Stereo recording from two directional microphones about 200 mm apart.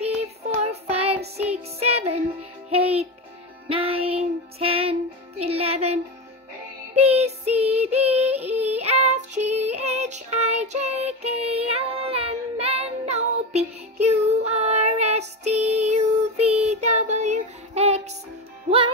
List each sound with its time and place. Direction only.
0.2 s child singing: 30° right (ahead or behind)
1.8 s music: 30° right (ahead or behind)
7.0 s music: 30° right (ahead or behind)